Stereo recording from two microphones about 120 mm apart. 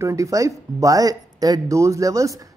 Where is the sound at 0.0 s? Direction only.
25° right (ahead or behind).